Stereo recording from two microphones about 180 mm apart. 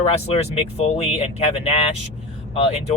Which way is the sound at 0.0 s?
35° left (ahead or behind).